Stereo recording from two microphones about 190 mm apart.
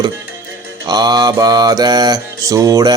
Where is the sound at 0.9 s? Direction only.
20° right (ahead or behind).